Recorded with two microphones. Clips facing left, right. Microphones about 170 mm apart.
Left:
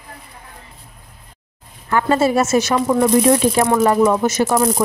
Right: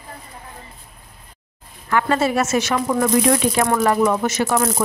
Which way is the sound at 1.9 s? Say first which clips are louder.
Left 3 dB; 30° left (ahead or behind).